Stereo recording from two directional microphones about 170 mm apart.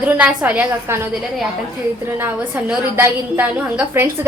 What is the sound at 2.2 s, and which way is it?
A woman's voice, 10° right (ahead or behind).